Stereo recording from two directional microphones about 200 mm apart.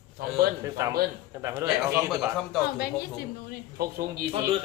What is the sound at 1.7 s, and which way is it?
Speech, centre (ahead or behind).